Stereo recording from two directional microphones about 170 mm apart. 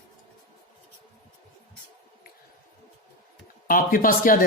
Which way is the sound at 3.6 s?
55° left (ahead or behind).